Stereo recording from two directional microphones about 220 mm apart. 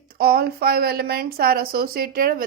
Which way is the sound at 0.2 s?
45° right (ahead or behind).